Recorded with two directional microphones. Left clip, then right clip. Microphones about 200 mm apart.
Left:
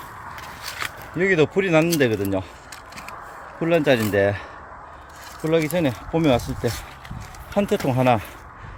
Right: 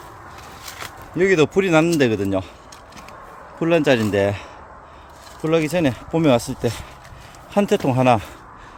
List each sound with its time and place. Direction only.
1.1 s speech: 15° right (ahead or behind)
3.6 s speech: 15° right (ahead or behind)